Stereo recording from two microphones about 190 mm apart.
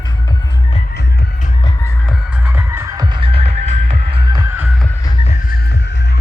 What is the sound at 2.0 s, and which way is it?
Music, 5° right (ahead or behind).